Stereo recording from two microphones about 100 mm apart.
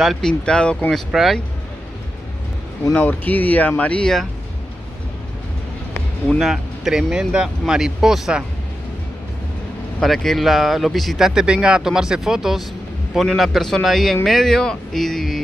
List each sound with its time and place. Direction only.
0.0 s speech: 5° left (ahead or behind)
2.9 s speech: 15° left (ahead or behind)
6.2 s speech: centre (ahead or behind)
9.9 s speech: centre (ahead or behind)